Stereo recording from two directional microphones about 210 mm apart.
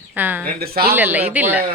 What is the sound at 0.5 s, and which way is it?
Speech, 45° right (ahead or behind).